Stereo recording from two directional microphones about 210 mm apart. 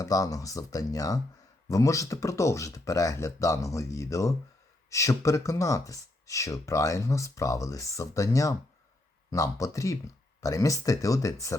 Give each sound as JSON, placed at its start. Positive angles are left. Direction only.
{"t": 0.0, "sound": "speech", "side_deg": 15}